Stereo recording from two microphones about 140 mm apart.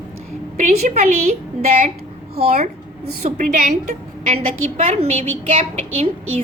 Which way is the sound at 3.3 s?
60° right (ahead or behind).